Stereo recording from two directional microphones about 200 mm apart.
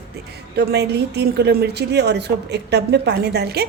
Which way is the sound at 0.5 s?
55° right (ahead or behind).